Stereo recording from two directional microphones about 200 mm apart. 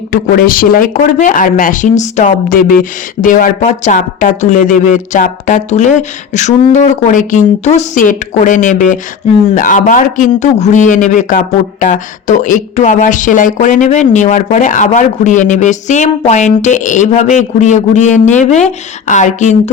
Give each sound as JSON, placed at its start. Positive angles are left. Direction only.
{"t": 0.1, "sound": "a man's voice", "side_deg": 45}